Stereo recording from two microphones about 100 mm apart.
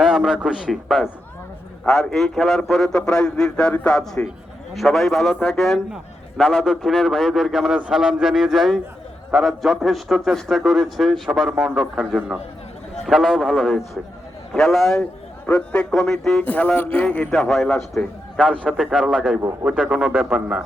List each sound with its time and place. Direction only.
0.0 s a man's voice: centre (ahead or behind)
15.4 s a man's voice: 15° left (ahead or behind)
16.4 s a man's voice: 15° left (ahead or behind)
17.3 s a man's voice: centre (ahead or behind)